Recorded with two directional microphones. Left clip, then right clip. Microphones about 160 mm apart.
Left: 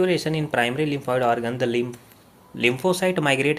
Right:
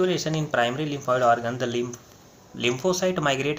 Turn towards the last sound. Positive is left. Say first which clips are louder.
# left 3 dB
turn(degrees=45)  # may be behind; listen again after turning